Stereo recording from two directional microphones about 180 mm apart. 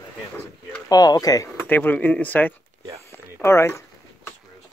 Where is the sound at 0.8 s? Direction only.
20° left (ahead or behind).